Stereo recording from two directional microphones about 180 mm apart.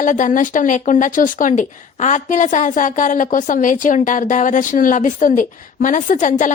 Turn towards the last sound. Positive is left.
turn(degrees=45)  # may be behind; listen again after turning